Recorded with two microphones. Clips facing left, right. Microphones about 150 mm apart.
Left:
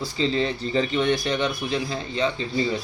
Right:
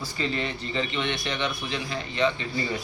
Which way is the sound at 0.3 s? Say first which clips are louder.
Left 6 dB; 35° left (ahead or behind).